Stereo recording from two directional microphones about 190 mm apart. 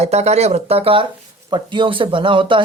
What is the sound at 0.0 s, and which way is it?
Speech, 35° right (ahead or behind).